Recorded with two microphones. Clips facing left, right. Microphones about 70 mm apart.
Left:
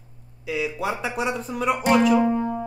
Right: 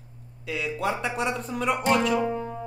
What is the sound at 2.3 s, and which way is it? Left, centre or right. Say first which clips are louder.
Music: left 6 dB; left.